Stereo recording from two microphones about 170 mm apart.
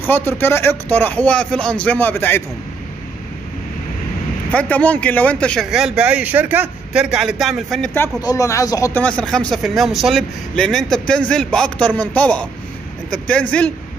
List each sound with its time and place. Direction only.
0.0 s speech: 15° left (ahead or behind)
4.5 s a man's voice: 10° left (ahead or behind)
7.9 s speech: 15° left (ahead or behind)
9.0 s a man's voice: 5° left (ahead or behind)